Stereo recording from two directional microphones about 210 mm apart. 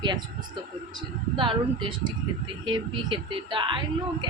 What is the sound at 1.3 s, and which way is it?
Speech, 25° right (ahead or behind).